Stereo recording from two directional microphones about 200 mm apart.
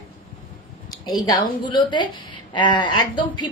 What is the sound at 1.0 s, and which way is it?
A woman's voice, 20° left (ahead or behind).